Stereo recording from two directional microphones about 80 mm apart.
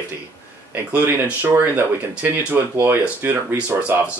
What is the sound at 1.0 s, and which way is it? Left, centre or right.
Speech, right.